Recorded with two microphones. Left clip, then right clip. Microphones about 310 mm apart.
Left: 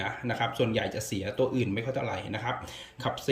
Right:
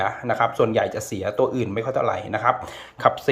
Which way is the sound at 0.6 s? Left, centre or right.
Right.